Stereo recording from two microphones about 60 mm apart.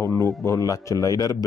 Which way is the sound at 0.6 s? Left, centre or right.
Left.